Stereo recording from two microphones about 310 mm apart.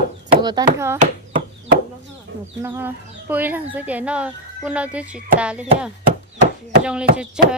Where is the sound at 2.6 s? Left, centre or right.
Centre.